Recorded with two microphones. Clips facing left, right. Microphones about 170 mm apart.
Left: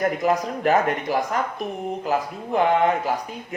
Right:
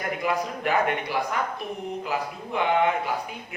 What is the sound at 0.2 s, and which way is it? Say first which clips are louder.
Speech: left 5 dB; 40° left (ahead or behind).